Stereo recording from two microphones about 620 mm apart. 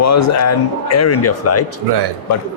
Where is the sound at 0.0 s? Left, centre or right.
Left.